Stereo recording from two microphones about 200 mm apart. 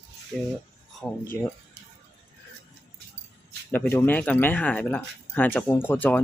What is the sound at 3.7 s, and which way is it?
Speech, 10° left (ahead or behind).